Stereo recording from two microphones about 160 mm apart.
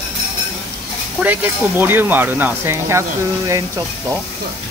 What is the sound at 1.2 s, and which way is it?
Speech, 10° right (ahead or behind).